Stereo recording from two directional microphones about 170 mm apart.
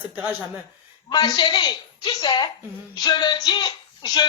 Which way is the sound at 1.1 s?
25° left (ahead or behind).